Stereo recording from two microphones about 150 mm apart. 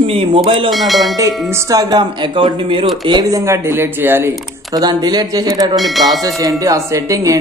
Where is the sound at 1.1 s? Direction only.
25° right (ahead or behind).